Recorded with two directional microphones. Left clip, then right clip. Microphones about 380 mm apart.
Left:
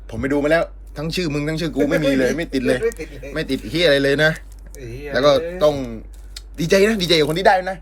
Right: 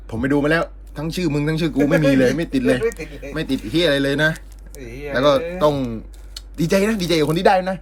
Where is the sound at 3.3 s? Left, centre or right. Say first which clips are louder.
Right 1 dB; centre.